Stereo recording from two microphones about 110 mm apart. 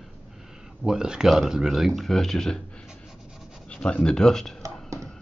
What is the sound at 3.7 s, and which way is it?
Speech, 10° left (ahead or behind).